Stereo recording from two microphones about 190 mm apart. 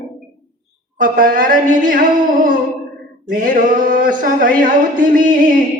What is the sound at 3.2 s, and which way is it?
Music, 45° right (ahead or behind).